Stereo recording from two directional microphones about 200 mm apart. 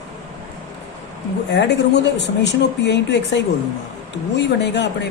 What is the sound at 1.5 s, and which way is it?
Speech, 55° left (ahead or behind).